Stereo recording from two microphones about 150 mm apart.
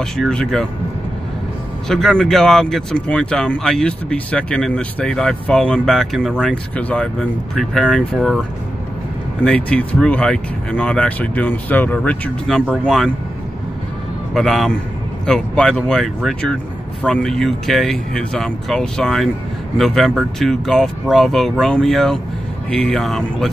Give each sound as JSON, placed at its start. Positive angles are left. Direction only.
{"t": 0.0, "sound": "speech", "side_deg": 5}
{"t": 1.9, "sound": "speech", "side_deg": 5}
{"t": 14.3, "sound": "speech", "side_deg": 0}